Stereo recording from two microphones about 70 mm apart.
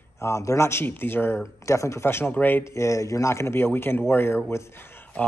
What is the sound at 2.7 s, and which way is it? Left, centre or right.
A man's voice, left.